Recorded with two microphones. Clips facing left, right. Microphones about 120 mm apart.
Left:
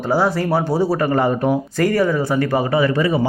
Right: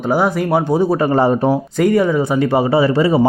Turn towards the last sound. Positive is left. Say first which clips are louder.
# right 4 dB
turn(degrees=-30)  # may be behind; listen again after turning